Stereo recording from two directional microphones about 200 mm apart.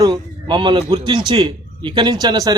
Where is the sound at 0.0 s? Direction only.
20° right (ahead or behind).